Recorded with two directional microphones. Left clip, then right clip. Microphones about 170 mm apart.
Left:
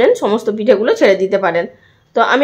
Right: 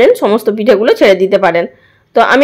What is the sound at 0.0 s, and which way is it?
Speech, 20° right (ahead or behind).